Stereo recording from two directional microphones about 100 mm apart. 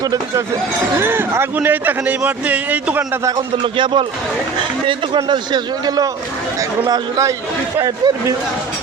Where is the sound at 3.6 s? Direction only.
55° right (ahead or behind); by 7.4 s 35° right (ahead or behind).